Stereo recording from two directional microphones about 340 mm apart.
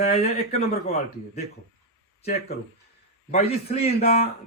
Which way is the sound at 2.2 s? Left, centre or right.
Centre.